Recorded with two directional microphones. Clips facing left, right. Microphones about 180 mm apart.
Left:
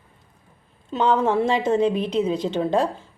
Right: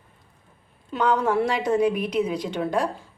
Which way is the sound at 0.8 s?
25° left (ahead or behind).